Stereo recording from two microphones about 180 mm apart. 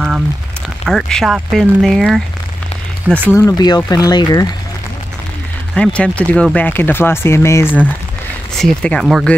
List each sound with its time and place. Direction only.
0.8 s speech: centre (ahead or behind)
3.1 s speech: 10° left (ahead or behind)
5.8 s speech: 5° left (ahead or behind)